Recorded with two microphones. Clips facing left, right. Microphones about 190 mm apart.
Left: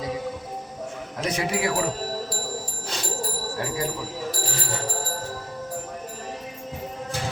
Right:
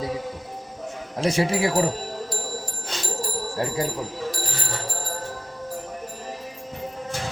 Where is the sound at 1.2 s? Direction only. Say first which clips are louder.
Right 4 dB; 30° right (ahead or behind).